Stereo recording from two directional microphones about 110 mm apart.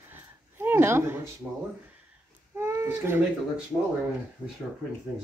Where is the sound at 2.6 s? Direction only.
25° right (ahead or behind).